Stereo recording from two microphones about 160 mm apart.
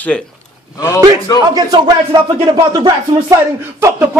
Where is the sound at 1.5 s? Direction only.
25° right (ahead or behind).